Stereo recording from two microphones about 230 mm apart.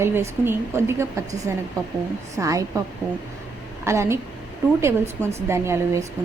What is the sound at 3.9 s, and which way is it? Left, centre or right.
Speech, centre.